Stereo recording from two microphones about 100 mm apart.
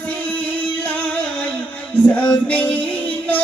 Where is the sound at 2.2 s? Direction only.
15° left (ahead or behind).